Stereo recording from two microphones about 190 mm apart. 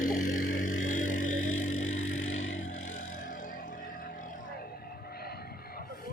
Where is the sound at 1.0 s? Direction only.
45° left (ahead or behind).